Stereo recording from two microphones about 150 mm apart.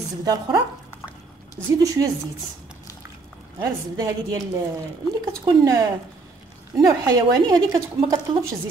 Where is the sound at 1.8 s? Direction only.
25° right (ahead or behind).